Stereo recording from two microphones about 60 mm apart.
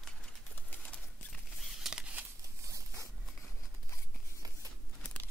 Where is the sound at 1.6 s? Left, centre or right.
Centre.